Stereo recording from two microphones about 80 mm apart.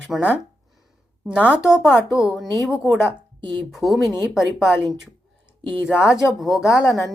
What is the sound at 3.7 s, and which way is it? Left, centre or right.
A woman's voice, centre.